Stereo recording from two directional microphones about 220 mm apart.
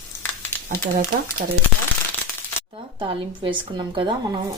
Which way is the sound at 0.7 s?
45° right (ahead or behind).